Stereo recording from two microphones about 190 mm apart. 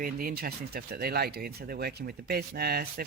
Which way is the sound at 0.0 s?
50° right (ahead or behind).